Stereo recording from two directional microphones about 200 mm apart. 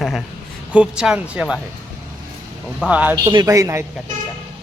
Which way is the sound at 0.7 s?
5° right (ahead or behind).